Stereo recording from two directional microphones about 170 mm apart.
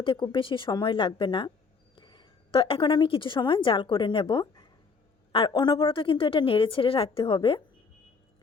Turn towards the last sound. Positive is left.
turn(degrees=30)  # may be behind; listen again after turning